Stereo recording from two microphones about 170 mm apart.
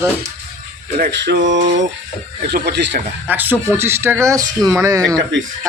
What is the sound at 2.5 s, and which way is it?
Speech, 75° right (ahead or behind).